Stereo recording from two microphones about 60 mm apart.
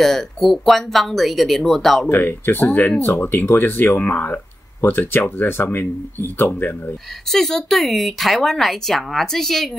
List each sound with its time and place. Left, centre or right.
0.0 s speech: centre
2.0 s speech: left
7.2 s speech: centre